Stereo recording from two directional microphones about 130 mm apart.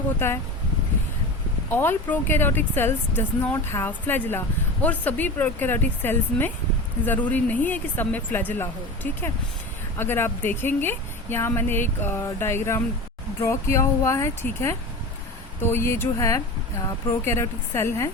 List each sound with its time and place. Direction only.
1.7 s speech: 15° left (ahead or behind)